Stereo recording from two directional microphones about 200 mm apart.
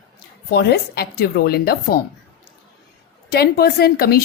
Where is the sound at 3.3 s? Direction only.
50° left (ahead or behind).